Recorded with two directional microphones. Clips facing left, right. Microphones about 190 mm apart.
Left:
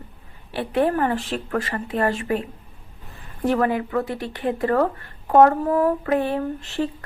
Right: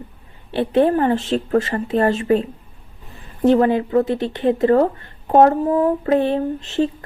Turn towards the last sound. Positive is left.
turn(degrees=-20)  # may be behind; listen again after turning